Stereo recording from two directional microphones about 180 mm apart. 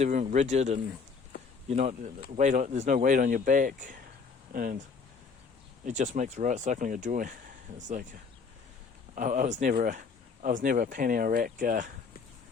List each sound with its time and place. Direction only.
0.0 s speech: 40° right (ahead or behind)
5.8 s speech: 45° right (ahead or behind)
9.1 s speech: 50° right (ahead or behind)